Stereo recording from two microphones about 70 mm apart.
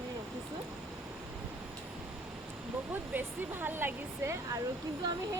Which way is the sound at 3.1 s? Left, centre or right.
Right.